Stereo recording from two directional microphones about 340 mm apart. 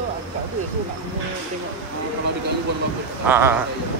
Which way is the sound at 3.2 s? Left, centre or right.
Centre.